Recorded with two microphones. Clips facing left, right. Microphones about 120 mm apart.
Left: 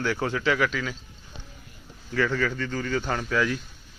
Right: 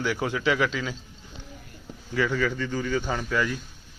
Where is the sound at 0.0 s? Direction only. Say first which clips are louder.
Even; 10° right (ahead or behind).